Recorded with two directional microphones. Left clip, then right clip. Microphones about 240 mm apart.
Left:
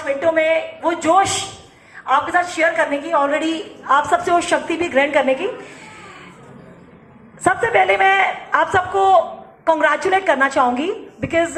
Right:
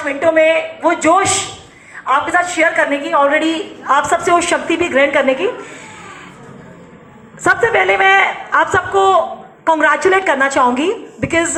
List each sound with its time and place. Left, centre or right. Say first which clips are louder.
0.0 s a woman's voice: right 5 dB; right
7.4 s a woman's voice: right 3 dB; right